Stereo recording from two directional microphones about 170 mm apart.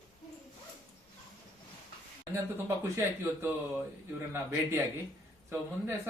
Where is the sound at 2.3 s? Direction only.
15° right (ahead or behind).